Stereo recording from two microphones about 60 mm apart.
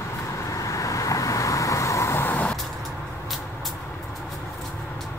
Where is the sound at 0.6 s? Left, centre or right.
Left.